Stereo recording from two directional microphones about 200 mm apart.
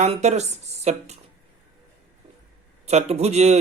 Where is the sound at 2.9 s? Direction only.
30° right (ahead or behind).